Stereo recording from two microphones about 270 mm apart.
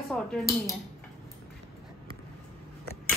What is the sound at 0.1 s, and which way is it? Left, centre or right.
Speech, centre.